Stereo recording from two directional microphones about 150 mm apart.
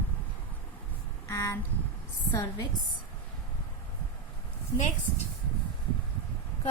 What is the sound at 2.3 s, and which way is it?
Speech, 25° left (ahead or behind).